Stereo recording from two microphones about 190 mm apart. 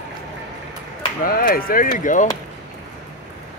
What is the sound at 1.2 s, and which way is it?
Speech, 50° left (ahead or behind).